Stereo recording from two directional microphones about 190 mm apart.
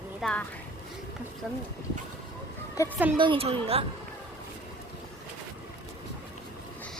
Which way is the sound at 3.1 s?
25° right (ahead or behind).